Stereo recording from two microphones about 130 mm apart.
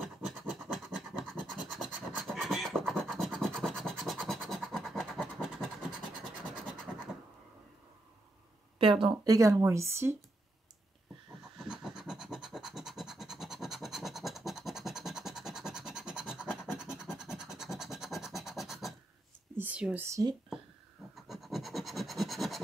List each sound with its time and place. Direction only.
0.0 s scratch: centre (ahead or behind)
8.7 s speech: 45° right (ahead or behind)
9.2 s speech: 25° right (ahead or behind)
11.5 s scratch: 5° right (ahead or behind)
19.5 s a sound: 10° right (ahead or behind)
20.1 s speech: 25° right (ahead or behind)
21.1 s scratch: centre (ahead or behind)